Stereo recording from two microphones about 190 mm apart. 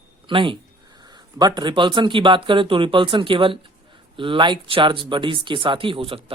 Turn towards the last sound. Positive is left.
turn(degrees=-30)  # may be behind; listen again after turning